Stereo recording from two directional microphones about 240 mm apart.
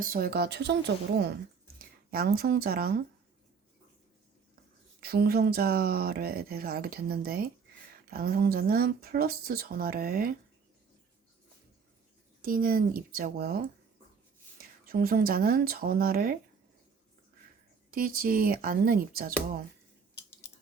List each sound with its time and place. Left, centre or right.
0.0 s a woman's voice: right
4.9 s speech: right
12.4 s speech: right
14.6 s speech: right
17.9 s speech: right